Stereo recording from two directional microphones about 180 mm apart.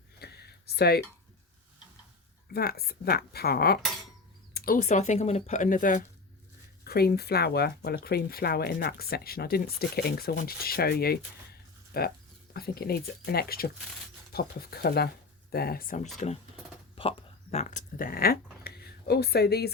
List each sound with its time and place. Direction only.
0.2 s a sound: 65° left (ahead or behind)
2.5 s speech: 60° left (ahead or behind)
6.8 s speech: 60° left (ahead or behind)
16.9 s speech: 30° left (ahead or behind); by 19.7 s 65° left (ahead or behind)